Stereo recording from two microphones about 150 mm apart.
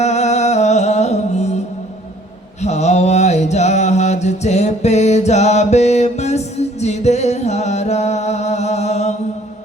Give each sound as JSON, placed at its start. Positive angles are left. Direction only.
{"t": 0.0, "sound": "music", "side_deg": 50}
{"t": 2.6, "sound": "mantra", "side_deg": 50}